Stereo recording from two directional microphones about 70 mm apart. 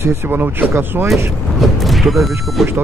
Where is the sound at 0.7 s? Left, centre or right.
Right.